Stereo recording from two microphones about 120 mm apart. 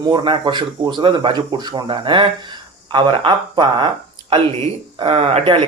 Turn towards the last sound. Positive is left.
turn(degrees=-55)  # may be behind; listen again after turning